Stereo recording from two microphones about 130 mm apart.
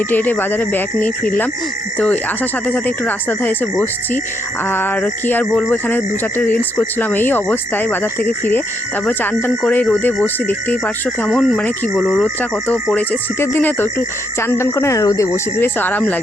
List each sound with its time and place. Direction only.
0.1 s speech: 15° left (ahead or behind)